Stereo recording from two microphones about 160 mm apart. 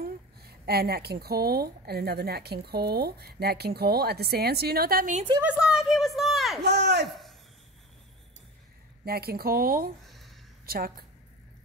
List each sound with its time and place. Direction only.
0.0 s speech: 75° right (ahead or behind)
5.4 s a woman's voice: 5° right (ahead or behind)
6.6 s a man's voice: 90° right
9.0 s speech: 75° right (ahead or behind)
10.0 s a sound: centre (ahead or behind)
10.6 s a woman's voice: 70° right (ahead or behind)